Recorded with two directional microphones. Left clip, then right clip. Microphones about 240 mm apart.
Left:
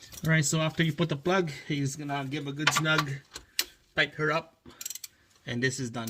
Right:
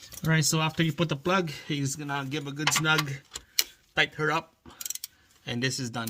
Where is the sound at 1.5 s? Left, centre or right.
Right.